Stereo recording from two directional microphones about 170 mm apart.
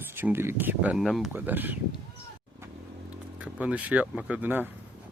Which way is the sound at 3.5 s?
10° right (ahead or behind).